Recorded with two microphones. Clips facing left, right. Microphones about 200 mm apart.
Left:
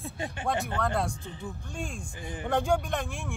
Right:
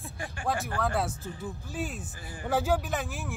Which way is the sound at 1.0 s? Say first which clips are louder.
Even; 5° right (ahead or behind).